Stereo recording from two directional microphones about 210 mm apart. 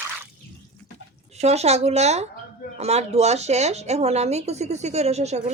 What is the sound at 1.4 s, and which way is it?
Speech, 30° right (ahead or behind).